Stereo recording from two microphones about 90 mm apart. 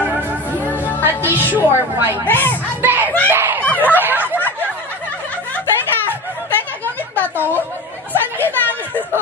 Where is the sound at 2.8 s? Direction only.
20° right (ahead or behind).